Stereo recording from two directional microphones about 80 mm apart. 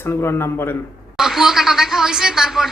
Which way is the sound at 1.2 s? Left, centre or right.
Centre.